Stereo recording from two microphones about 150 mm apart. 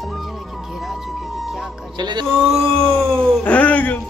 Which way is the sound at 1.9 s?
30° right (ahead or behind).